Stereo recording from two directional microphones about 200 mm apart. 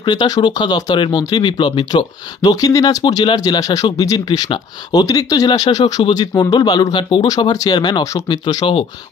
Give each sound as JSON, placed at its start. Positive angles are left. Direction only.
{"t": 0.0, "sound": "speech", "side_deg": 20}